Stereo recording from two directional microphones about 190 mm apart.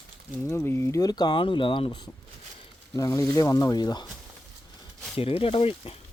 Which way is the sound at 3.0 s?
15° left (ahead or behind).